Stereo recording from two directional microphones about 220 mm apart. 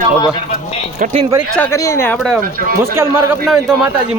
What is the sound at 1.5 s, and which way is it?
Speech, 10° left (ahead or behind).